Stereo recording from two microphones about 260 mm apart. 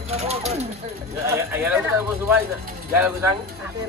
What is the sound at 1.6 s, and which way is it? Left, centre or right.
Speech, centre.